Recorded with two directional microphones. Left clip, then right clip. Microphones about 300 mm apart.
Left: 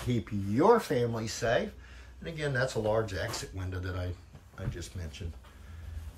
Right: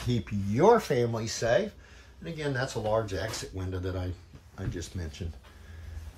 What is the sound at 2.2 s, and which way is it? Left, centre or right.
Speech, centre.